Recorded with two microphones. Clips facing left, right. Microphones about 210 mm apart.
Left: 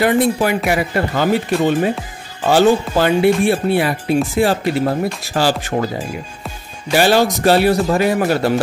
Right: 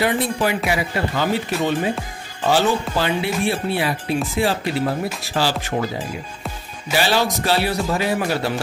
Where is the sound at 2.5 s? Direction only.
50° left (ahead or behind).